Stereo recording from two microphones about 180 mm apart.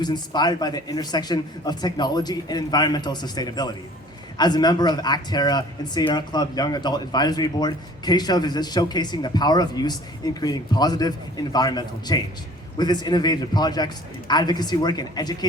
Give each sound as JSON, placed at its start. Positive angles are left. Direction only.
{"t": 0.0, "sound": "speech", "side_deg": 25}